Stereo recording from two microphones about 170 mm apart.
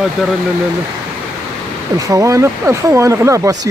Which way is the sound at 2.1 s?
15° right (ahead or behind).